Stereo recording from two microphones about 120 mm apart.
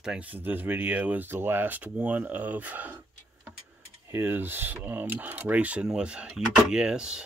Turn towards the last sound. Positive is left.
turn(degrees=-5)  # may be behind; listen again after turning